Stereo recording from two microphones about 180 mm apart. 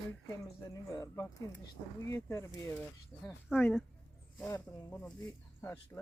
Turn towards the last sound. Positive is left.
turn(degrees=10)  # may be behind; listen again after turning